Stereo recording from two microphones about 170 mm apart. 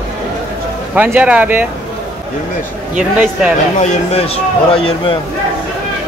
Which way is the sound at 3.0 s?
5° right (ahead or behind).